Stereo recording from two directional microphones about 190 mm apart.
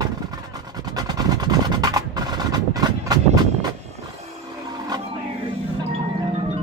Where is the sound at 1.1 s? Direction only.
20° right (ahead or behind).